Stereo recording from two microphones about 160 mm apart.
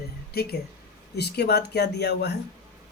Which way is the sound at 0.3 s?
80° left.